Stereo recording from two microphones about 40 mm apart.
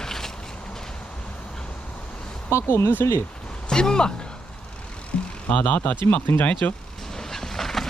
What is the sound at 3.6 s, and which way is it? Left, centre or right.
Speech, centre.